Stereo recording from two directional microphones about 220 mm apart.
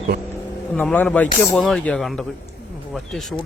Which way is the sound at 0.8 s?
5° left (ahead or behind).